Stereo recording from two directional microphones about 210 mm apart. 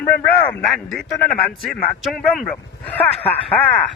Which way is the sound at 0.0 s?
10° left (ahead or behind).